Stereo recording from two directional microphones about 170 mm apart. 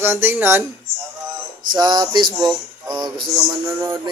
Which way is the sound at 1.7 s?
25° right (ahead or behind).